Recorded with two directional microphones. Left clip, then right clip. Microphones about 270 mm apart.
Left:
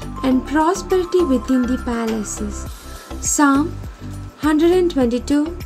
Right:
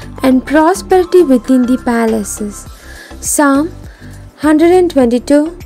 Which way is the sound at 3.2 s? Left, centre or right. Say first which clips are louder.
Right 5 dB; right.